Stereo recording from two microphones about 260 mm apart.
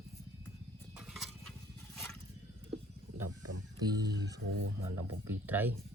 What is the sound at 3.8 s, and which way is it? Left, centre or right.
Music, centre.